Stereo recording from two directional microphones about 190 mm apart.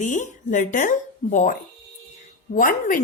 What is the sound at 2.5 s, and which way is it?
Speech, 45° left (ahead or behind).